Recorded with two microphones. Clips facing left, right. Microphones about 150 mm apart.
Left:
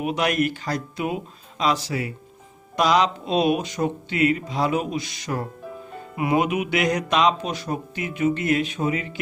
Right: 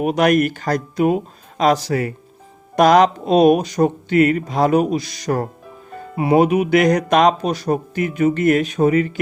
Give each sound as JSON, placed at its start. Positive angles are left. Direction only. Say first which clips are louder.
{"t": 0.0, "sound": "speech", "louder": "right 7 dB", "side_deg": -45}